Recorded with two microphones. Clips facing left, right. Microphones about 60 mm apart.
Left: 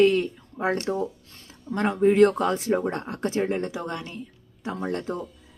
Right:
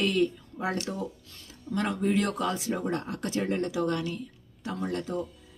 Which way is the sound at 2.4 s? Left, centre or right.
Left.